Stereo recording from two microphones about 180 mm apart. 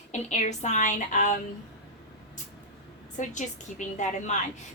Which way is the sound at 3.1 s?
45° left (ahead or behind).